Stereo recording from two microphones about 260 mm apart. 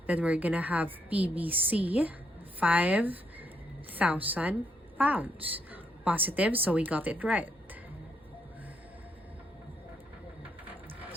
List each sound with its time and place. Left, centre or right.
0.1 s a woman's voice: centre